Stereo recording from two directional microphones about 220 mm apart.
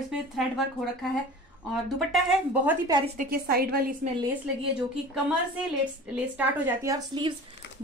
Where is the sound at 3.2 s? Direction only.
45° right (ahead or behind).